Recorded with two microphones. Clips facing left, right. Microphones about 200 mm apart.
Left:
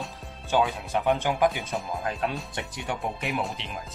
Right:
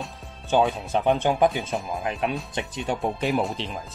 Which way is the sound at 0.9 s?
25° right (ahead or behind).